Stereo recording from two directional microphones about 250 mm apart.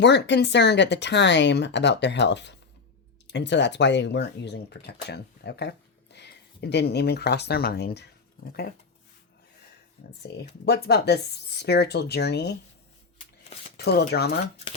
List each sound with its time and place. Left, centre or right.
0.0 s speech: left
10.2 s speech: left
13.7 s speech: left